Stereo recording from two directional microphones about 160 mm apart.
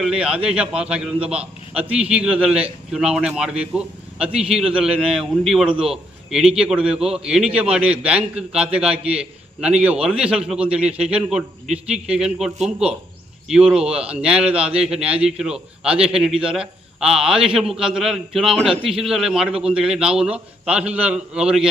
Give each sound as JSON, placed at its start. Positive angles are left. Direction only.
{"t": 0.0, "sound": "a man's voice", "side_deg": -5}